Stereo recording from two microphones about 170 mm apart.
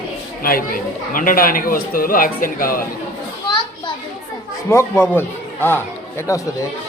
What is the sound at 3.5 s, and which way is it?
Children playing, 25° left (ahead or behind).